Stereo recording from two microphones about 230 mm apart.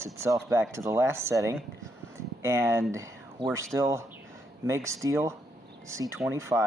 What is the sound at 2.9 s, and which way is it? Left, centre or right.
Speech, centre.